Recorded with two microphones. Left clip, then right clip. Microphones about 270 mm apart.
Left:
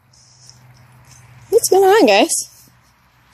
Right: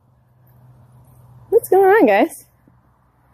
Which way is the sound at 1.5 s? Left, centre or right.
Centre.